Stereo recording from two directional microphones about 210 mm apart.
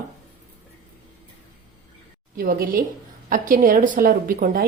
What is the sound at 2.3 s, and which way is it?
A woman's voice, 45° right (ahead or behind).